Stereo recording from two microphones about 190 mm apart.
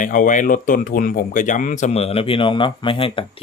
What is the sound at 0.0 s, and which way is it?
Speech, 45° left (ahead or behind).